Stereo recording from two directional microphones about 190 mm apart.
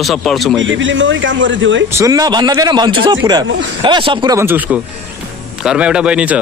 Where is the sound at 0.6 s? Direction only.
80° right.